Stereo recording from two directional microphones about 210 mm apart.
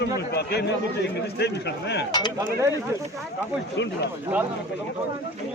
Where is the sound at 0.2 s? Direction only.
50° left (ahead or behind).